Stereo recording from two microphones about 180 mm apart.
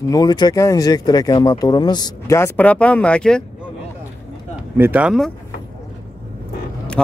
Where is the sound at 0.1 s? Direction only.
20° left (ahead or behind); by 3.4 s 5° left (ahead or behind).